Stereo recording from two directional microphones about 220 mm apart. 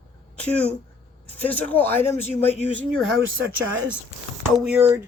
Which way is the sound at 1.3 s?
5° left (ahead or behind).